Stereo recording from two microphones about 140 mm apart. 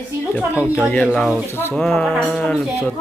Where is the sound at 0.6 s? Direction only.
10° right (ahead or behind).